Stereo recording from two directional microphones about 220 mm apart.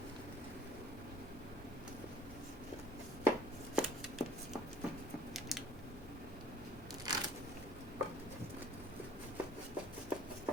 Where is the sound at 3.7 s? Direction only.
Centre (ahead or behind).